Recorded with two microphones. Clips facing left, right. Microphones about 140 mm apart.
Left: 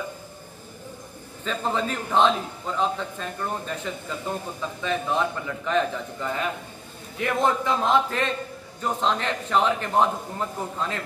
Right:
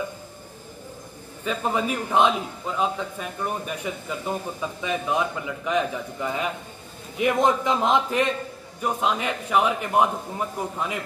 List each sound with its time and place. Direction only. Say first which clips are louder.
1.4 s a man's voice: right 1 dB; 10° right (ahead or behind)